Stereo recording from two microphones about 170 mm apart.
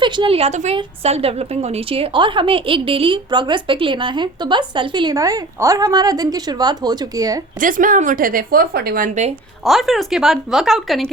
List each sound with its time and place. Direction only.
0.0 s a woman's voice: 30° right (ahead or behind)
7.6 s a woman's voice: 50° right (ahead or behind)
9.6 s speech: centre (ahead or behind)